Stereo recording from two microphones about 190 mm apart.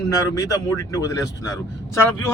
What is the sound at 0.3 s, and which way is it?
Speech, 20° left (ahead or behind).